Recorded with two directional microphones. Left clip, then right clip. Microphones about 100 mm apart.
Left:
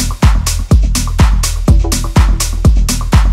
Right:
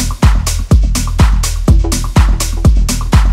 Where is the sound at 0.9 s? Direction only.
Centre (ahead or behind).